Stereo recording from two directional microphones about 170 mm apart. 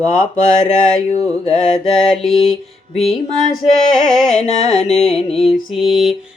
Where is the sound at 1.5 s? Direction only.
Centre (ahead or behind).